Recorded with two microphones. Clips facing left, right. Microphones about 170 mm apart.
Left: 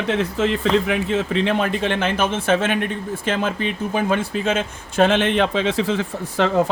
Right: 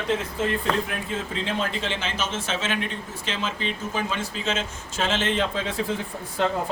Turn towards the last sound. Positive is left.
turn(degrees=85)